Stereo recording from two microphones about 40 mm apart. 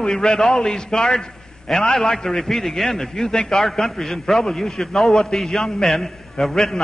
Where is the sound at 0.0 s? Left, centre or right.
Centre.